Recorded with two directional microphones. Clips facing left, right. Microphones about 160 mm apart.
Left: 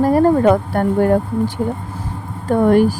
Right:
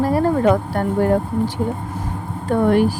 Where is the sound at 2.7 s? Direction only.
45° left (ahead or behind).